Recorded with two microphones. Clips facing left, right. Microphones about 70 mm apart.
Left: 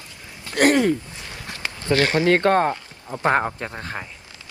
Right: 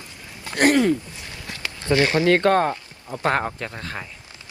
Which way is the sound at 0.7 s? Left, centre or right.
Left.